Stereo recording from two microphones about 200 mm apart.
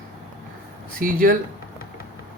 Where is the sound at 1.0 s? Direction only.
45° right (ahead or behind).